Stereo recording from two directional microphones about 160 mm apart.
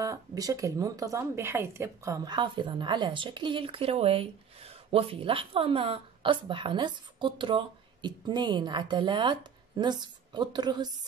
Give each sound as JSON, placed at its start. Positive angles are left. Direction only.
{"t": 0.0, "sound": "speech", "side_deg": -20}